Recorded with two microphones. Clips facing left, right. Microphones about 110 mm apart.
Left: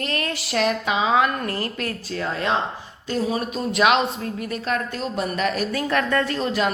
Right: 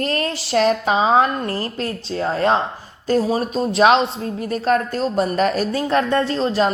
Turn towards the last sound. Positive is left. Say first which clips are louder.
# right 4 dB
turn(degrees=-30)  # may be behind; listen again after turning